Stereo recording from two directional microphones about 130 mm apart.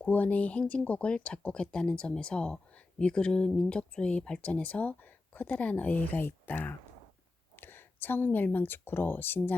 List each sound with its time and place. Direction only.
0.0 s speech: 10° left (ahead or behind)